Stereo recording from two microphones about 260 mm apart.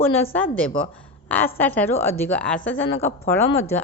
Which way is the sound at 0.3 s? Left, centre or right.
Centre.